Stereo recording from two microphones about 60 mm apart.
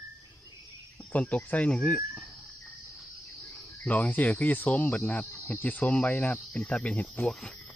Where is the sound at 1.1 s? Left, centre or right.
Left.